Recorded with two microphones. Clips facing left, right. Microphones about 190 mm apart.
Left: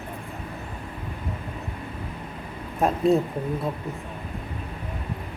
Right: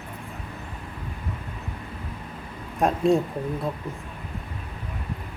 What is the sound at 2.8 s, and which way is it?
Speech, centre (ahead or behind).